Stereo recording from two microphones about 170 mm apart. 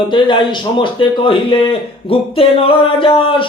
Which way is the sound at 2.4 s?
30° left (ahead or behind).